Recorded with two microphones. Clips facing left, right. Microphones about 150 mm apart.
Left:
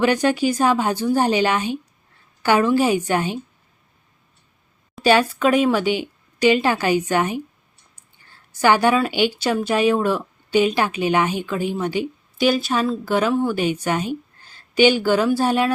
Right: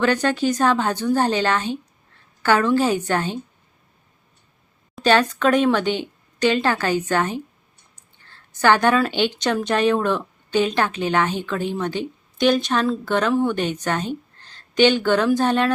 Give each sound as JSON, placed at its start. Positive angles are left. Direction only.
{"t": 0.0, "sound": "a woman's voice", "side_deg": 10}
{"t": 5.0, "sound": "a woman's voice", "side_deg": 10}